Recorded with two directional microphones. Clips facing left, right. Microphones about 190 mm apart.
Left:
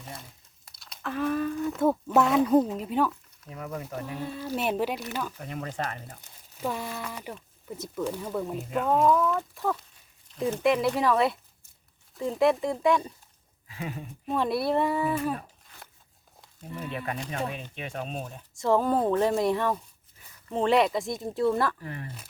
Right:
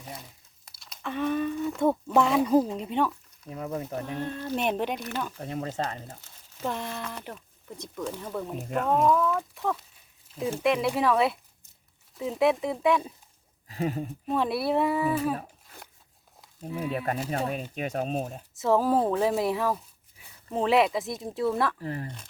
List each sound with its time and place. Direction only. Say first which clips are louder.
0.0 s crumpling: right 1 dB; centre (ahead or behind)
3.5 s speech: right 3 dB; 30° right (ahead or behind)
4.0 s speech: right 2 dB; 5° left (ahead or behind)
5.4 s speech: right 2 dB; 25° right (ahead or behind)
6.2 s speech: left 1 dB; 10° left (ahead or behind)
13.7 s speech: right 7 dB; 40° right (ahead or behind)
14.3 s speech: even; centre (ahead or behind)
16.4 s a sound: right 5 dB; 5° right (ahead or behind)
17.2 s speech: right 3 dB; 35° right (ahead or behind)
18.5 s speech: right 1 dB; 5° right (ahead or behind)
21.8 s speech: right 5 dB; 30° right (ahead or behind)